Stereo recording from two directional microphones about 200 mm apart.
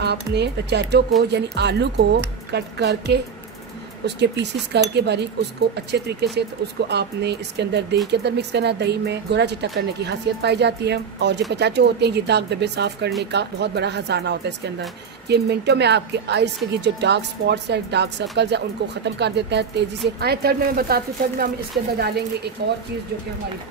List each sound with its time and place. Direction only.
0.0 s a woman's voice: 55° right (ahead or behind)